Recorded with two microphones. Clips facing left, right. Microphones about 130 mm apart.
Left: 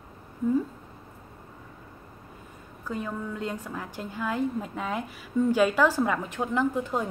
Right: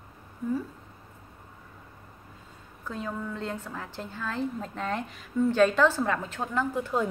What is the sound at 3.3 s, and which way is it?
A woman's voice, 10° left (ahead or behind).